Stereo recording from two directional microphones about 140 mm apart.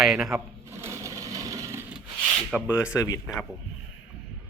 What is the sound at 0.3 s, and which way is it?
Sewing machine, 20° right (ahead or behind).